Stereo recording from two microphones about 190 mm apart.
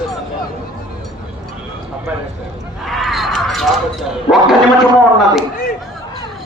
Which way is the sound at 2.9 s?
Centre (ahead or behind).